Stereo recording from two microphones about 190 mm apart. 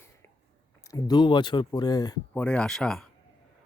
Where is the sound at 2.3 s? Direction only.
5° left (ahead or behind).